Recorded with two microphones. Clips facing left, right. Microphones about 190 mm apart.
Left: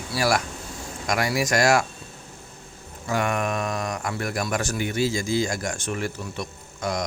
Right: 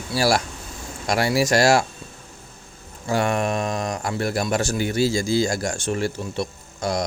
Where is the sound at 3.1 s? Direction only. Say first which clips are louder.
Right 3 dB; 30° right (ahead or behind).